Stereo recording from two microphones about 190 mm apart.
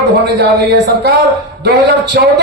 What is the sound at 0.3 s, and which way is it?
Speech, 60° right (ahead or behind).